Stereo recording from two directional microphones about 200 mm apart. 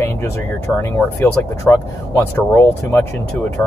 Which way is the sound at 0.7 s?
10° left (ahead or behind).